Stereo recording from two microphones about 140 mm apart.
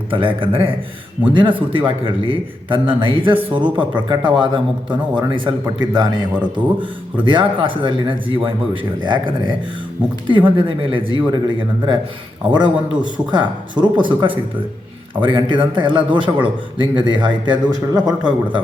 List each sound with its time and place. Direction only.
0.1 s a man's voice: 40° right (ahead or behind)
18.2 s a man's voice: 10° right (ahead or behind)